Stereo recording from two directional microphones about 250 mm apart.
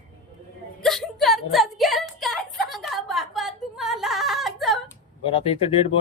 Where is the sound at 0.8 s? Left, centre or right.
Centre.